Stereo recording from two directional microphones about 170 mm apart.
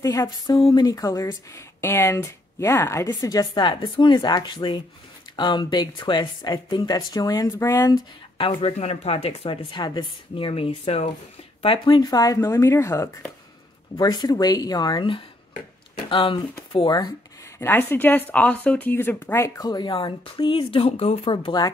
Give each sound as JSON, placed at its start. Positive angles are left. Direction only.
{"t": 0.0, "sound": "a woman's voice", "side_deg": 20}
{"t": 8.4, "sound": "a woman's voice", "side_deg": 35}
{"t": 17.6, "sound": "a woman's voice", "side_deg": 15}